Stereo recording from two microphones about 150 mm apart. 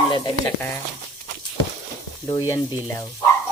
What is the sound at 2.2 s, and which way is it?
Speech, 20° left (ahead or behind).